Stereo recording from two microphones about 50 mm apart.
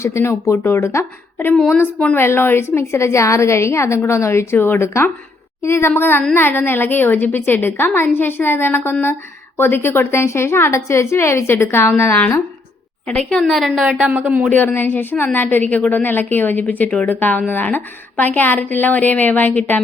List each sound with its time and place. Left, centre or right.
0.0 s a woman's voice: left
2.1 s a woman's voice: left
4.5 s a woman's voice: left
5.6 s a woman's voice: left
5.9 s a woman's voice: left
13.1 s a woman's voice: left
13.8 s a woman's voice: centre
14.1 s speech: right
14.5 s a woman's voice: left
16.0 s a woman's voice: left